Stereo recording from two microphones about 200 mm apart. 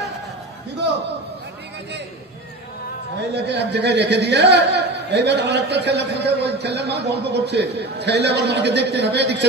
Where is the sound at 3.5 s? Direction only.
60° right (ahead or behind).